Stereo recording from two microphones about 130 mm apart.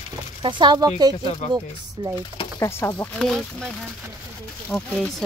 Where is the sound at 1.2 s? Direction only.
55° left (ahead or behind).